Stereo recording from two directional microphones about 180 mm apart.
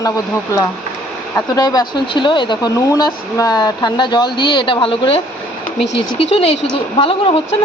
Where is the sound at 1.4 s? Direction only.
20° left (ahead or behind).